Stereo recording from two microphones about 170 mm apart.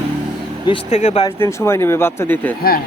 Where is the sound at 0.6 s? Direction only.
30° left (ahead or behind).